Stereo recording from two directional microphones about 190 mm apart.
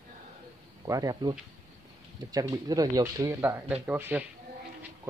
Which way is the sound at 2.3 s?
20° right (ahead or behind).